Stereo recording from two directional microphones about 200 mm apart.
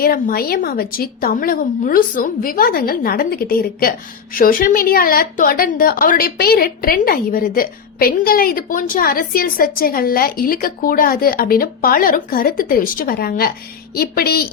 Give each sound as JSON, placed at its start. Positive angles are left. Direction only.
{"t": 0.0, "sound": "a woman's voice", "side_deg": 50}